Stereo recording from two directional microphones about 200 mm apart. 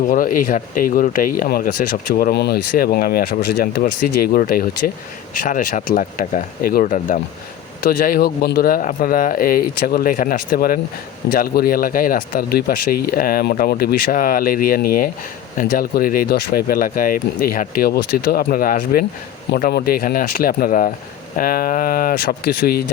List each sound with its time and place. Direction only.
0.0 s speech: 45° left (ahead or behind)